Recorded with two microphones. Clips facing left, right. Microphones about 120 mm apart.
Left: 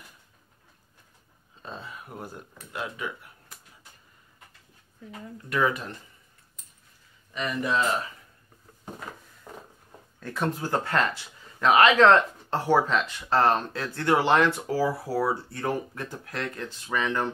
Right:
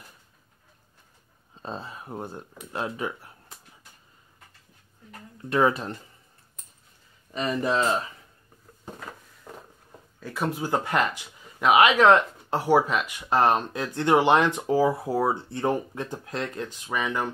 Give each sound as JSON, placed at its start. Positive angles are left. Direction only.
{"t": 1.6, "sound": "speech", "side_deg": -35}
{"t": 5.5, "sound": "speech", "side_deg": -30}
{"t": 7.3, "sound": "speech", "side_deg": -30}
{"t": 10.2, "sound": "speech", "side_deg": -5}